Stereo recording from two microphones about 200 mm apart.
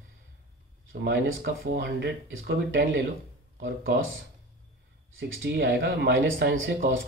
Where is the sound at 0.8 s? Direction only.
75° right (ahead or behind).